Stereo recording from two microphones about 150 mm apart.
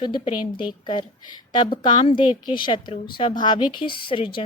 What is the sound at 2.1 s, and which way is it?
A woman's voice, 30° left (ahead or behind).